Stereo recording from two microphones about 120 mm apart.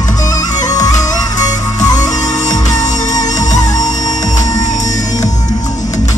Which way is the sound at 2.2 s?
90° left.